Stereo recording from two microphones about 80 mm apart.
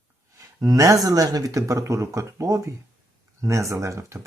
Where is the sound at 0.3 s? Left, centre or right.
Right.